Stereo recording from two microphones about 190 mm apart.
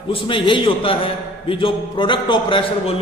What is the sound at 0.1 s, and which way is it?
A man's voice, 25° left (ahead or behind).